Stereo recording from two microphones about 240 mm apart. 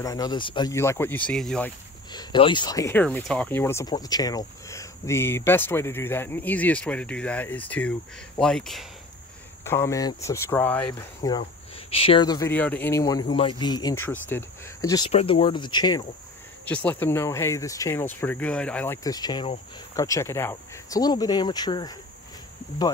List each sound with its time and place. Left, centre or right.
0.0 s speech: centre
2.1 s speech: centre
11.2 s speech: left
16.6 s speech: centre